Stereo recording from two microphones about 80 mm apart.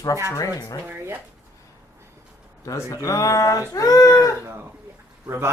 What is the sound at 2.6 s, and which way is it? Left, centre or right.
Speech, left.